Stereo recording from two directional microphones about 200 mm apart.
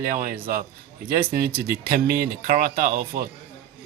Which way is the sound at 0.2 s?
45° right (ahead or behind).